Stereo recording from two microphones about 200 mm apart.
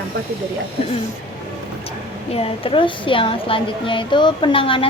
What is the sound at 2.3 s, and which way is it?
Speech, 25° left (ahead or behind).